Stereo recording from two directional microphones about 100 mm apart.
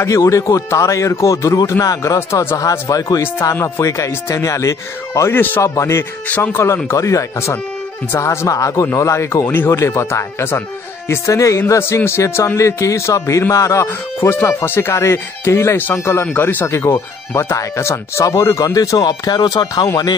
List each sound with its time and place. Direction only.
0.0 s speech: 30° left (ahead or behind)
6.2 s speech: 20° left (ahead or behind); by 19.9 s 40° left (ahead or behind)